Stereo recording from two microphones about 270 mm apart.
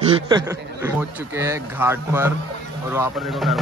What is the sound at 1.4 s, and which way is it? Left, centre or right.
A man's voice, centre.